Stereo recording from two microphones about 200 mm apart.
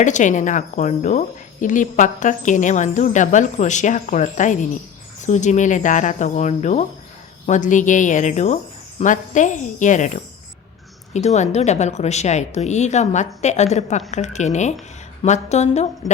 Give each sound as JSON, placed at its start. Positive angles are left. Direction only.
{"t": 0.0, "sound": "speech", "side_deg": 40}
{"t": 11.1, "sound": "speech", "side_deg": 35}